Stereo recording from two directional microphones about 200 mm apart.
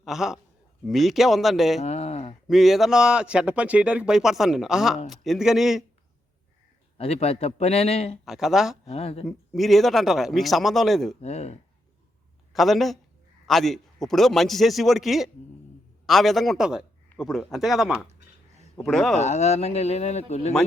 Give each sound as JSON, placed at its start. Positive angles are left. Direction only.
{"t": 0.0, "sound": "speech", "side_deg": 0}
{"t": 1.8, "sound": "a sound", "side_deg": 35}
{"t": 2.5, "sound": "speech", "side_deg": 0}
{"t": 7.0, "sound": "speech", "side_deg": 30}
{"t": 8.2, "sound": "speech", "side_deg": 0}
{"t": 8.9, "sound": "speech", "side_deg": 30}
{"t": 9.2, "sound": "speech", "side_deg": 0}
{"t": 11.2, "sound": "speech", "side_deg": 35}
{"t": 12.5, "sound": "speech", "side_deg": 0}
{"t": 19.1, "sound": "speech", "side_deg": 35}